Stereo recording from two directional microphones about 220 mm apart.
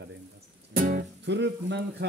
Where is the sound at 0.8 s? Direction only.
40° right (ahead or behind).